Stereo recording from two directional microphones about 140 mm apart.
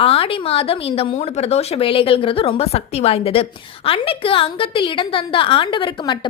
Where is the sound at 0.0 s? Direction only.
40° left (ahead or behind).